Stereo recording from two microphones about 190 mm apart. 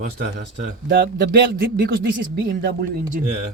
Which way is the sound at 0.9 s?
60° right (ahead or behind).